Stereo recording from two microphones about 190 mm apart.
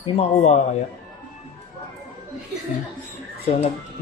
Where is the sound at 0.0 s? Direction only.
35° left (ahead or behind).